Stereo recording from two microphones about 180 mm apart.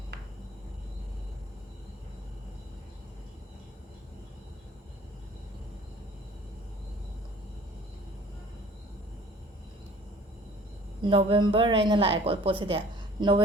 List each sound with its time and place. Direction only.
11.0 s a woman's voice: 30° right (ahead or behind)